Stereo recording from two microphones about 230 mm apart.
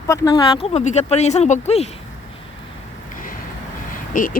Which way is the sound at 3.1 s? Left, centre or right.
Left.